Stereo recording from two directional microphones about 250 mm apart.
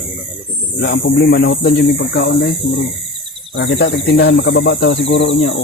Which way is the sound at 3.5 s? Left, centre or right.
Left.